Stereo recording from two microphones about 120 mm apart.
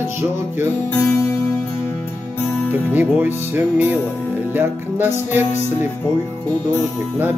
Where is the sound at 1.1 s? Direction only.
25° left (ahead or behind).